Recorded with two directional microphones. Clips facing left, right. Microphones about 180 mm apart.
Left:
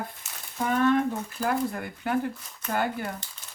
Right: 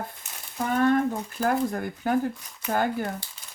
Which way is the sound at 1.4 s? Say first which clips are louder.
Right 3 dB; 45° right (ahead or behind).